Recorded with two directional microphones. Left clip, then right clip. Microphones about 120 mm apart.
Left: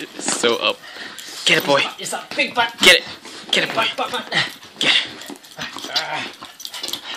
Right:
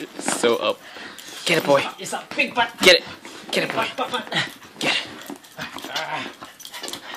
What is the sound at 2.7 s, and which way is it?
Speech, 10° right (ahead or behind).